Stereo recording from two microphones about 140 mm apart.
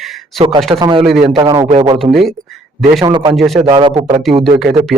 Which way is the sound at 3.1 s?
35° right (ahead or behind).